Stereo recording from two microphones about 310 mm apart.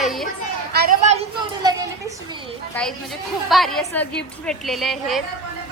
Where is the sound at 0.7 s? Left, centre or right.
Right.